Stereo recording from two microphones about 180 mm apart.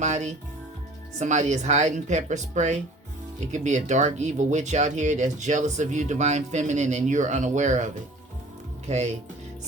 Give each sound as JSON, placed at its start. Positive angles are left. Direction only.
{"t": 0.0, "sound": "speech", "side_deg": -40}
{"t": 8.9, "sound": "speech", "side_deg": -40}